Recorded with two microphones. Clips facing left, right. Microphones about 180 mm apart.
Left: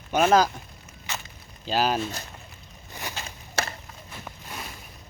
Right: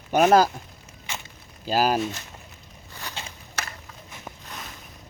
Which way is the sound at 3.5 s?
30° left (ahead or behind).